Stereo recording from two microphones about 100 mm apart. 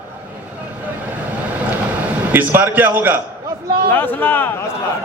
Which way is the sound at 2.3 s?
20° right (ahead or behind).